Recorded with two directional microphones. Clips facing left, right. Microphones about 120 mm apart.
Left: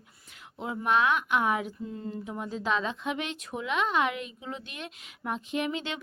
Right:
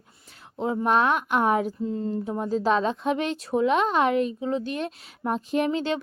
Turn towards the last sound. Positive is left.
turn(degrees=-35)  # may be behind; listen again after turning